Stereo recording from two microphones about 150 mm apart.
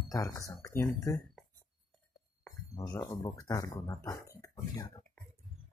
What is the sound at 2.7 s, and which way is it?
Speech, 25° left (ahead or behind).